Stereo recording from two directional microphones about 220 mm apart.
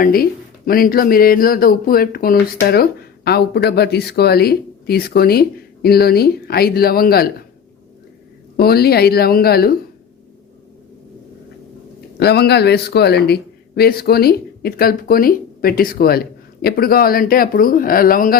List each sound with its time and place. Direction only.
0.0 s speech: 40° left (ahead or behind)
8.5 s speech: 45° left (ahead or behind)
12.1 s speech: 45° left (ahead or behind)